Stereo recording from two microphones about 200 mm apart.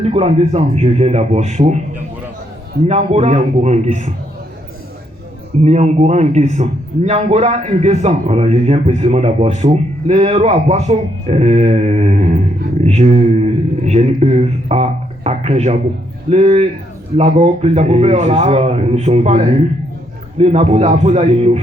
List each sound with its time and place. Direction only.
0.0 s a man's voice: 30° right (ahead or behind)
2.8 s a man's voice: 35° right (ahead or behind)
5.6 s a man's voice: 35° right (ahead or behind)